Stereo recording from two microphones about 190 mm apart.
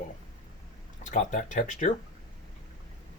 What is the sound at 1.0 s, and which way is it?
Speech, 40° left (ahead or behind).